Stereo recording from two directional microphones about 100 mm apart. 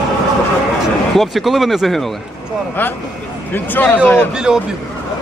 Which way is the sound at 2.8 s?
20° left (ahead or behind).